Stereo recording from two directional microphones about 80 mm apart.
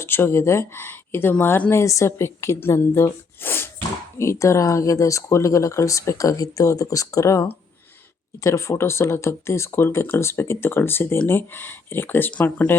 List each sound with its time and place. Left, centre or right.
0.0 s speech: left
1.7 s speech: left
4.2 s speech: left
8.4 s speech: left; by 12.6 s centre